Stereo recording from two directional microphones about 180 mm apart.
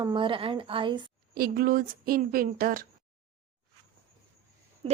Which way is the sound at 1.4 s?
55° right (ahead or behind).